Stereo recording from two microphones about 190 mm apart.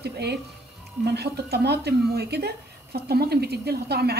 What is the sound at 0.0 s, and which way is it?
Speech, 60° right (ahead or behind).